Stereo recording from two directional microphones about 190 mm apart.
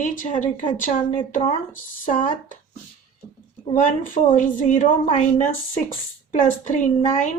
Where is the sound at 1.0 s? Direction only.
25° left (ahead or behind).